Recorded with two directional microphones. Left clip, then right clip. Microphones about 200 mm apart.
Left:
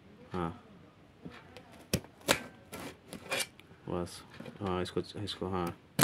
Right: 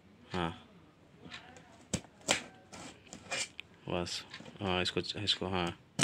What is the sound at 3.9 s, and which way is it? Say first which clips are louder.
Speech: right 2 dB; 5° left (ahead or behind).